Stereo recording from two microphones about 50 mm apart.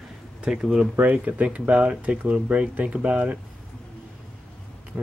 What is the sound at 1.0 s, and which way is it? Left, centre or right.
Speech, right.